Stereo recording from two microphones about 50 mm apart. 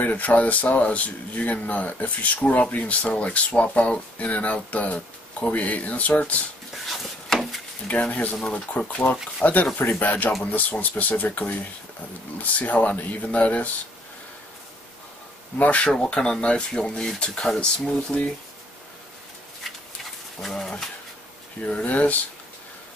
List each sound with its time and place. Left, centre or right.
0.0 s speech: left
8.1 s speech: left
8.4 s speech: centre
9.0 s speech: left
12.5 s speech: left
15.5 s speech: left
15.9 s speech: centre
20.4 s speech: centre
21.6 s speech: left